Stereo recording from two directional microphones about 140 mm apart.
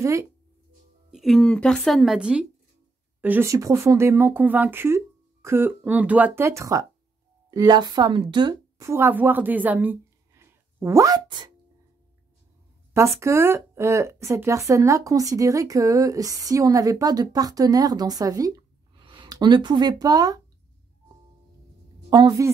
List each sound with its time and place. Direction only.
0.0 s speech: 20° right (ahead or behind)
1.1 s speech: centre (ahead or behind); by 8.8 s 30° right (ahead or behind)
8.8 s speech: 15° right (ahead or behind)
13.2 s speech: 20° right (ahead or behind)
22.1 s speech: 30° right (ahead or behind)